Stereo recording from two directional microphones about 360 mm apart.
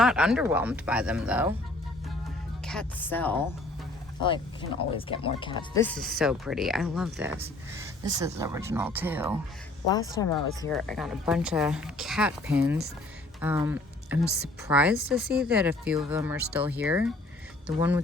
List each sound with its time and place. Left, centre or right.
0.0 s speech: centre
2.6 s speech: centre
10.1 s speech: centre